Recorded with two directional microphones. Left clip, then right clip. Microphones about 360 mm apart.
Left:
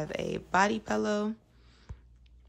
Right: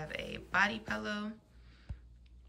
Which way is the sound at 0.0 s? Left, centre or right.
Centre.